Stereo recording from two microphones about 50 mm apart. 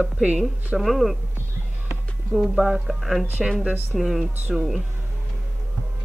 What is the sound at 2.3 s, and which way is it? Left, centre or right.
Speech, centre.